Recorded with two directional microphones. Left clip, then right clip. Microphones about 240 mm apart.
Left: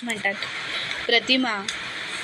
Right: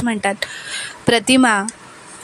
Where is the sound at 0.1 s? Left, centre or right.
Right.